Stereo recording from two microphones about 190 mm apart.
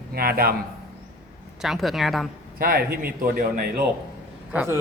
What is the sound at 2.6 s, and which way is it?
Speech, 50° right (ahead or behind).